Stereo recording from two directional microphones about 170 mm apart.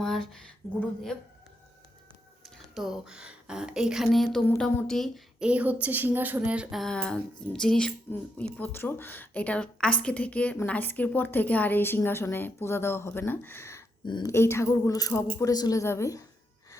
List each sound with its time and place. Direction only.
0.0 s speech: centre (ahead or behind)
2.7 s speech: centre (ahead or behind); by 16.2 s 15° left (ahead or behind)